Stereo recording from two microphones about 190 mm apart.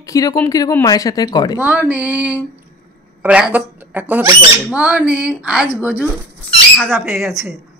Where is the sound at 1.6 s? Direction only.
10° right (ahead or behind).